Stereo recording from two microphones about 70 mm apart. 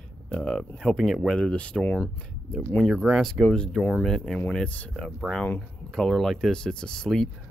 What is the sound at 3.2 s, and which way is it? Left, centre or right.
Speech, centre.